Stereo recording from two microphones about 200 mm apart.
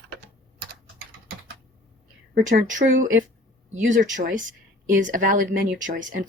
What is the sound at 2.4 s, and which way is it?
Speech, 40° right (ahead or behind).